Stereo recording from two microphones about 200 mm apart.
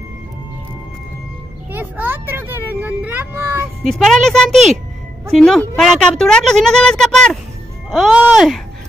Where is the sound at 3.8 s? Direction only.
Centre (ahead or behind).